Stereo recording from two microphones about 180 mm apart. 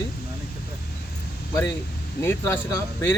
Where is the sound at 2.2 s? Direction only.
15° left (ahead or behind).